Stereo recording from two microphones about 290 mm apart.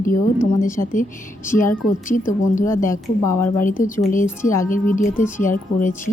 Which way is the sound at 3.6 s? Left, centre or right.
Left.